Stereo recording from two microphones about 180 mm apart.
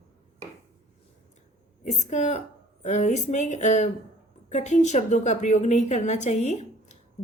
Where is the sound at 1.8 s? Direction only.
40° left (ahead or behind).